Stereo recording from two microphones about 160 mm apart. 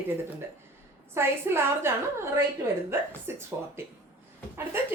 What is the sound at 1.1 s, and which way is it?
Speech, 15° right (ahead or behind).